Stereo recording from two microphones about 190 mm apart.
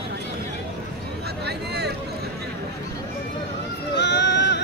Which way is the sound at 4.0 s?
65° left (ahead or behind).